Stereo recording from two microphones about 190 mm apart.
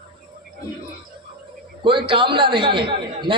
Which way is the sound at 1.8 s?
25° right (ahead or behind).